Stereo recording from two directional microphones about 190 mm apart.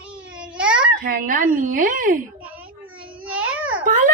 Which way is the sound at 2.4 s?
10° right (ahead or behind).